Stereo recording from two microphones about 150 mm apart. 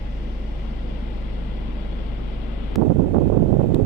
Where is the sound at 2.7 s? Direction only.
Centre (ahead or behind).